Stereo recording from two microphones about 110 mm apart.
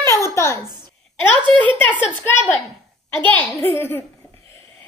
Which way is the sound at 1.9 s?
15° left (ahead or behind).